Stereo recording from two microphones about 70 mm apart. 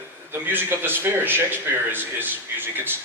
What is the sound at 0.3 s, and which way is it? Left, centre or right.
A man's voice, right.